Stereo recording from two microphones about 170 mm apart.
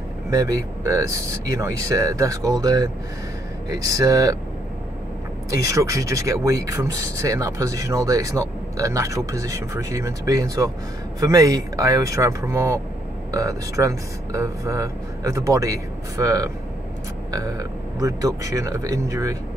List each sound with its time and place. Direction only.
0.3 s speech: 20° right (ahead or behind)
5.5 s speech: 20° right (ahead or behind)